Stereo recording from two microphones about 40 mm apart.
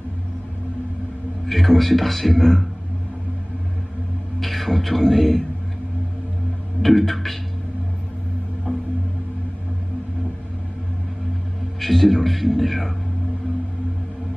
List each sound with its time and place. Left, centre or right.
1.4 s a man's voice: centre
4.4 s speech: centre
6.8 s a man's voice: centre
8.7 s music: centre
11.8 s a man's voice: centre